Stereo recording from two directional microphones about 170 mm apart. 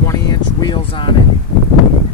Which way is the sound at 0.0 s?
20° left (ahead or behind).